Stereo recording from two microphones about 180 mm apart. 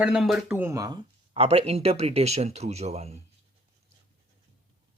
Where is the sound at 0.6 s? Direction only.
20° right (ahead or behind).